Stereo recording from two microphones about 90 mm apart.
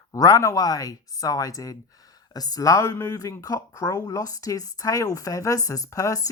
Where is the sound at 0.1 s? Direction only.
45° left (ahead or behind).